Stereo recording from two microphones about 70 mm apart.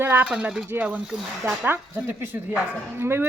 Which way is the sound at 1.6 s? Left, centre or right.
Right.